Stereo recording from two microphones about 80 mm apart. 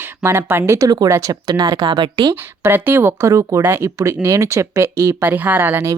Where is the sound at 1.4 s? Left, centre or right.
Right.